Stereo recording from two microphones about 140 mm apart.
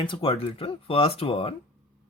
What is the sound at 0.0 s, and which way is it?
Speech, 40° left (ahead or behind).